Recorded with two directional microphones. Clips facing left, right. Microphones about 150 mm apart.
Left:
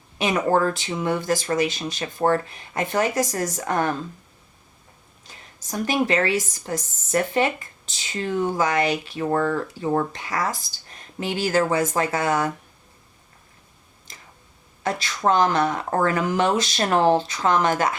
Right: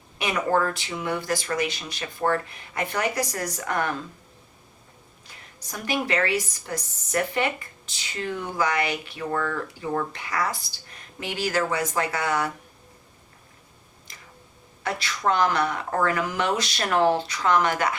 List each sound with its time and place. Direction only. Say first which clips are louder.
0.3 s speech: left 3 dB; 30° left (ahead or behind)
1.6 s speech: left 5 dB; 40° left (ahead or behind)
3.2 s speech: left 4 dB; 40° left (ahead or behind)
5.7 s speech: left 4 dB; 30° left (ahead or behind)
14.8 s speech: left 4 dB; 25° left (ahead or behind)
15.3 s speech: left 3 dB; 40° left (ahead or behind)
15.5 s speech: left 3 dB; 25° left (ahead or behind)